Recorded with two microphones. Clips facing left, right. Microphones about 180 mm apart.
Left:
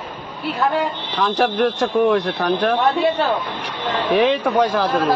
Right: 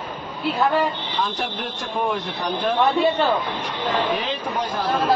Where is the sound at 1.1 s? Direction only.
75° left (ahead or behind).